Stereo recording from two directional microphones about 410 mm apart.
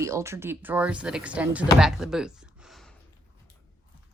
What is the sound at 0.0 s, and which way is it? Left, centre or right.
Speech, centre.